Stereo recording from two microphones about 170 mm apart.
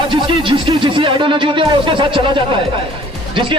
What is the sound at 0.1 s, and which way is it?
Speech, 30° right (ahead or behind).